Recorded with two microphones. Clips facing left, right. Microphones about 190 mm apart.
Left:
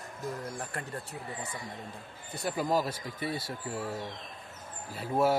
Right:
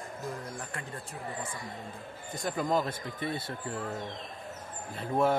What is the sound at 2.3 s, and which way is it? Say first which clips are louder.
Speech: even; 10° left (ahead or behind).